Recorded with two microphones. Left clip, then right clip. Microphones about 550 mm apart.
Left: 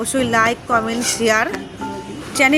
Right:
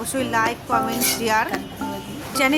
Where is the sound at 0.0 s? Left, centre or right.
Right.